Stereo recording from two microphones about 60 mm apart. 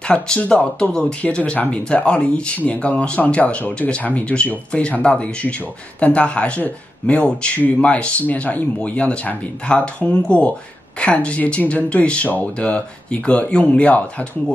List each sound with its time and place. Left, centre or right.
0.1 s speech: centre